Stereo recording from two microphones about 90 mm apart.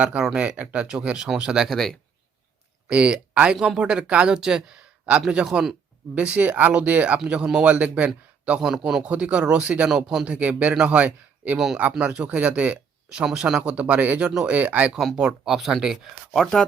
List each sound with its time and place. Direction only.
0.0 s speech: 15° right (ahead or behind)
1.6 s speech: 5° left (ahead or behind)
2.9 s speech: 10° right (ahead or behind)
14.9 s speech: 5° right (ahead or behind)